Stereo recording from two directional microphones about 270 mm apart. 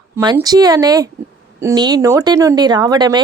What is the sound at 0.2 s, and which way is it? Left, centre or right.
Speech, centre.